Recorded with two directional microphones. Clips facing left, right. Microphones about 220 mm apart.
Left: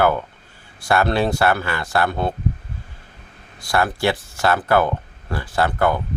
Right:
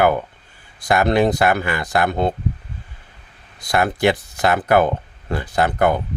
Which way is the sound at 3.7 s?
20° right (ahead or behind).